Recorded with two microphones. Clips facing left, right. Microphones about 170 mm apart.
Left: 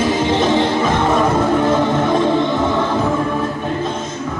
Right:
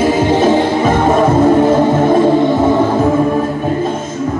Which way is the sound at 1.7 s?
45° right (ahead or behind).